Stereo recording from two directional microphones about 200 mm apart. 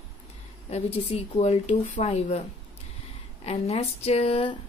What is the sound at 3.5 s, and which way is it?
Speech, 30° left (ahead or behind).